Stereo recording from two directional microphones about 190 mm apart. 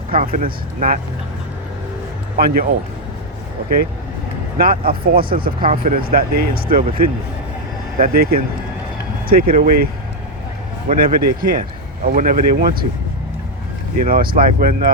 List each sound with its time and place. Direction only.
0.1 s speech: 45° right (ahead or behind)
2.4 s speech: 50° right (ahead or behind)
4.5 s speech: 50° right (ahead or behind)
7.9 s speech: 50° right (ahead or behind)
10.8 s speech: 50° right (ahead or behind)
14.0 s speech: 50° right (ahead or behind)